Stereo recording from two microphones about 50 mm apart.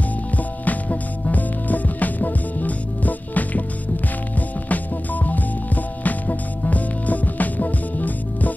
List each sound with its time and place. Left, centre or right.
0.7 s music: left